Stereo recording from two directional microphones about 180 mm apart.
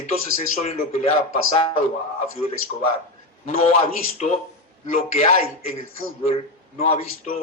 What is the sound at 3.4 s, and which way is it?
Speech, 35° left (ahead or behind).